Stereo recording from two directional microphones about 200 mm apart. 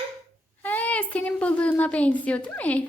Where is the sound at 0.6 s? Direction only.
10° left (ahead or behind).